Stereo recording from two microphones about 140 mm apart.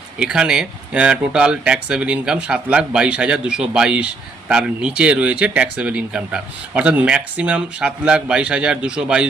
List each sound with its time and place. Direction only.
0.2 s speech: 5° right (ahead or behind)